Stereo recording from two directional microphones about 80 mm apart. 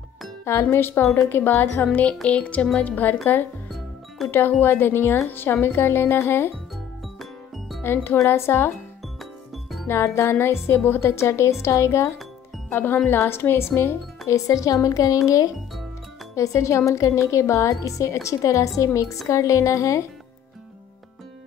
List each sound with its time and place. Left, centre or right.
0.5 s a woman's voice: left
4.3 s speech: left
7.2 s music: centre
7.8 s speech: left
9.2 s music: centre
9.8 s a woman's voice: left